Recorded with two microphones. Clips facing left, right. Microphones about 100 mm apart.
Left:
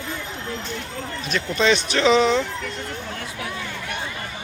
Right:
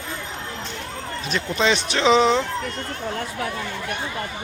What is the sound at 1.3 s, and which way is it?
Speech, 25° right (ahead or behind).